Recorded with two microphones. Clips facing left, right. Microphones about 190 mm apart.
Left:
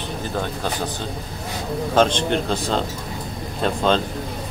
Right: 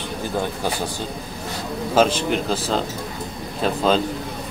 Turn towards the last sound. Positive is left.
turn(degrees=-5)  # may be behind; listen again after turning